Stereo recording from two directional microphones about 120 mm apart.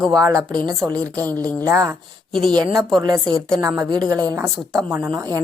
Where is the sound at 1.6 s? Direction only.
25° right (ahead or behind).